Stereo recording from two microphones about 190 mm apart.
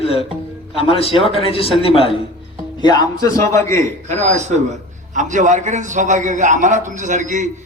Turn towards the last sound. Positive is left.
turn(degrees=-40)  # may be behind; listen again after turning